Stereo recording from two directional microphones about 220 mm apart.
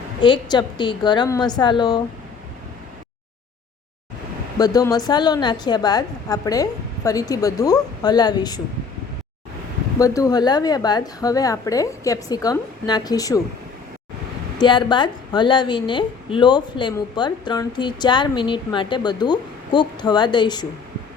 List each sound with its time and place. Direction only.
0.2 s a woman's voice: 20° left (ahead or behind)
4.5 s a woman's voice: 15° left (ahead or behind)
10.0 s a woman's voice: 15° left (ahead or behind)
14.6 s a woman's voice: 20° left (ahead or behind)